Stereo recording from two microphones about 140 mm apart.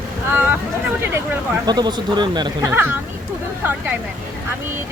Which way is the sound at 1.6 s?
30° right (ahead or behind).